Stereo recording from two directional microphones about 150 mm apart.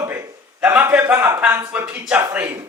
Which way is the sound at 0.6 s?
10° right (ahead or behind).